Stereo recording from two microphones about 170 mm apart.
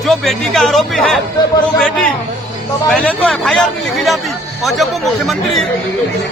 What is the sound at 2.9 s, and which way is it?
Speech, centre (ahead or behind).